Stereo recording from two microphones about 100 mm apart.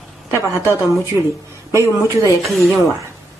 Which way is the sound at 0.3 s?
30° right (ahead or behind).